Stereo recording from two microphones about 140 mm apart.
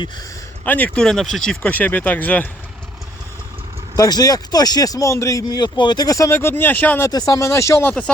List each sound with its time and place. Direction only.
0.6 s speech: 10° left (ahead or behind)
3.9 s speech: 25° left (ahead or behind)
7.1 s speech: 25° left (ahead or behind)